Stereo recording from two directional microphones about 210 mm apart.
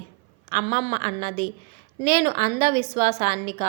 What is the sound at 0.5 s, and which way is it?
A woman's voice, 25° right (ahead or behind).